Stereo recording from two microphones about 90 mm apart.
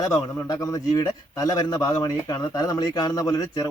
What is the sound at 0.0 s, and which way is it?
Speech, 45° left (ahead or behind).